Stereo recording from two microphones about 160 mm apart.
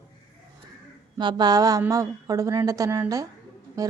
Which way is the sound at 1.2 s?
25° right (ahead or behind).